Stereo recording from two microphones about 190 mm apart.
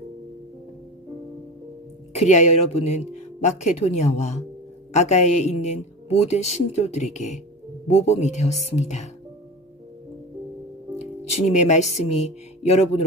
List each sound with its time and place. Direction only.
2.1 s a woman's voice: 35° left (ahead or behind)
11.0 s speech: 35° left (ahead or behind)